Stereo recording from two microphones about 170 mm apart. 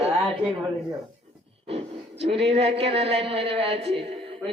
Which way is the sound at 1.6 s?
35° right (ahead or behind).